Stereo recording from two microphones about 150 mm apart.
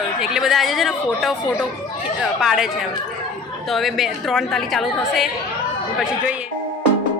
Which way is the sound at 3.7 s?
Centre (ahead or behind).